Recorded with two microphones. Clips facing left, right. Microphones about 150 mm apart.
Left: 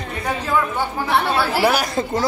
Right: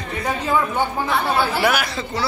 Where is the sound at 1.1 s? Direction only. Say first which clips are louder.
Left 4 dB; 80° left.